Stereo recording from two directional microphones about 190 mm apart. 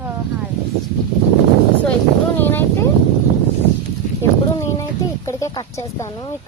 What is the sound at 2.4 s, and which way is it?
Speech, 10° left (ahead or behind).